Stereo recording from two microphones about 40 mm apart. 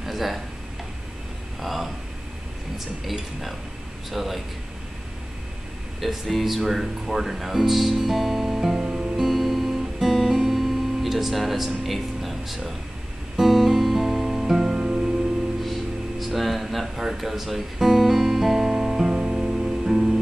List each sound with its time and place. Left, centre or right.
0.0 s a sound: centre
1.6 s speech: centre
3.1 s speech: centre
5.9 s speech: centre
9.1 s music: centre
16.2 s a sound: centre
17.1 s speech: centre
19.1 s music: right